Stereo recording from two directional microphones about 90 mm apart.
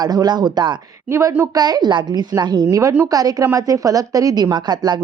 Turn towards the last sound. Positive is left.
turn(degrees=-50)  # may be behind; listen again after turning